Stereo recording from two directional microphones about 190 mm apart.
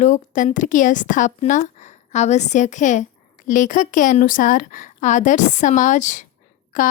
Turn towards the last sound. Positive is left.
turn(degrees=45)  # may be behind; listen again after turning